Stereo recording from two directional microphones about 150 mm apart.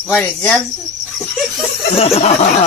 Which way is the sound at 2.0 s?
40° left (ahead or behind).